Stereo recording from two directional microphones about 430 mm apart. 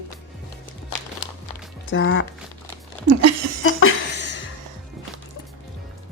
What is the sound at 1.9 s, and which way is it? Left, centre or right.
Speech, left.